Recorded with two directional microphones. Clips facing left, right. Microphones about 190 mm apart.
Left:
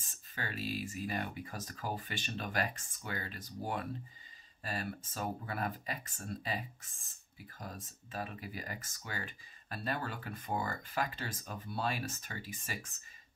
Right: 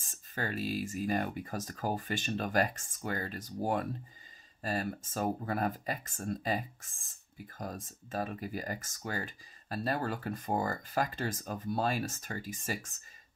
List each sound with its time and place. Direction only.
0.0 s speech: 45° right (ahead or behind)